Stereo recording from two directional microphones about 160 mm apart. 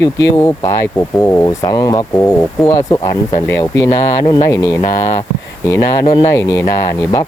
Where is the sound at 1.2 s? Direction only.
25° left (ahead or behind).